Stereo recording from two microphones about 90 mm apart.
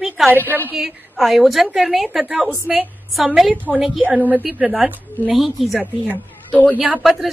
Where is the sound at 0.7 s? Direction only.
5° right (ahead or behind).